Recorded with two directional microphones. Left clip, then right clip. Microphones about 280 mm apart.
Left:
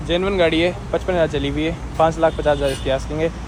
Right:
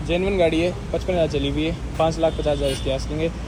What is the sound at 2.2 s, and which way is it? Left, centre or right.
Speech, left.